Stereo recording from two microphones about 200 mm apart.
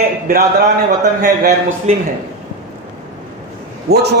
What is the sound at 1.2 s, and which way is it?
Speech, 45° right (ahead or behind).